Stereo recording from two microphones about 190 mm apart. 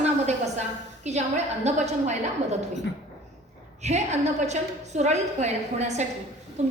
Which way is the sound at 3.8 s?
35° right (ahead or behind).